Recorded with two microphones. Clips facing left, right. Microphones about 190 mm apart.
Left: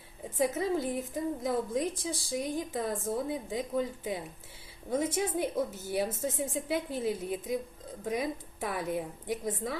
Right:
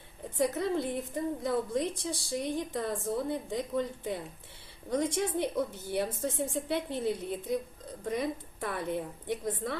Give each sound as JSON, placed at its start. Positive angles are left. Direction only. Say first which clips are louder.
{"t": 0.3, "sound": "a woman's voice", "louder": "even", "side_deg": 0}